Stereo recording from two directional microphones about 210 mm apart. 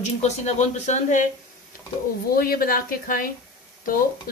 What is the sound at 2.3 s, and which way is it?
Speech, 45° left (ahead or behind).